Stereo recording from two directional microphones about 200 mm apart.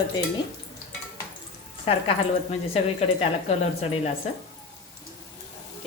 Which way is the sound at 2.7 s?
30° left (ahead or behind).